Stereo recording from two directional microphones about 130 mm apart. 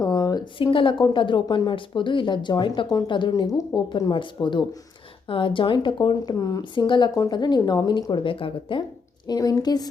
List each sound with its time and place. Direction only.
0.0 s speech: 30° left (ahead or behind)
9.2 s speech: 30° left (ahead or behind)